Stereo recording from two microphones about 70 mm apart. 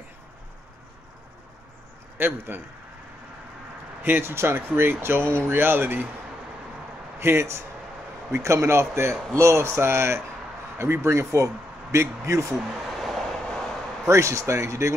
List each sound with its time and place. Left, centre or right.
2.1 s a man's voice: right
4.0 s a man's voice: right
7.2 s a man's voice: right
12.5 s a sound: centre
14.0 s speech: right